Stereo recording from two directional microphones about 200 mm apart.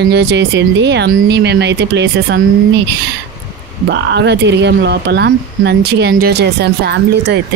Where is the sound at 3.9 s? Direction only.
60° right (ahead or behind).